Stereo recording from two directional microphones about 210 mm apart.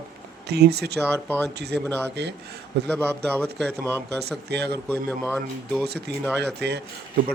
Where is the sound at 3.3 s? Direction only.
5° left (ahead or behind).